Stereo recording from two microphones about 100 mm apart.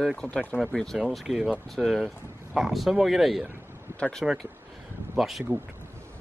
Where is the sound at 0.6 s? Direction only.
Centre (ahead or behind).